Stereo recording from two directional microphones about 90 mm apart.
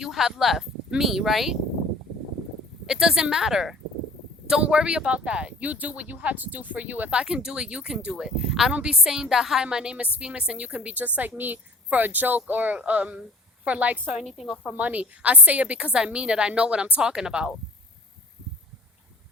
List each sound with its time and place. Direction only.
0.0 s speech: 5° right (ahead or behind)
2.8 s speech: 10° right (ahead or behind)
14.2 s speech: centre (ahead or behind)
14.8 s speech: 15° right (ahead or behind)